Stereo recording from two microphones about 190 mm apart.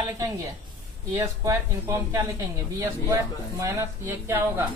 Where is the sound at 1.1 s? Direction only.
15° right (ahead or behind).